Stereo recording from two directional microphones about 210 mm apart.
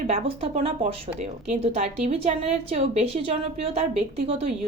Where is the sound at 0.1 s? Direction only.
30° right (ahead or behind).